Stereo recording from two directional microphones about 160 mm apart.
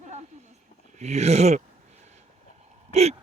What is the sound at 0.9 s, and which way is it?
Speech, 45° right (ahead or behind).